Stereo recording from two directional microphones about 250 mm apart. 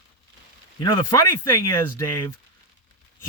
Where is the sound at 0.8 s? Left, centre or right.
Centre.